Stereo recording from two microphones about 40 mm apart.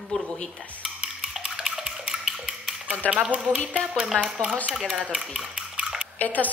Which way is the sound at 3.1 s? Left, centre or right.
Right.